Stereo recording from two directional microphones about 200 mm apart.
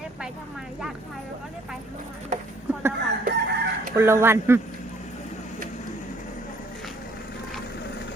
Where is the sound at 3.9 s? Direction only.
10° right (ahead or behind).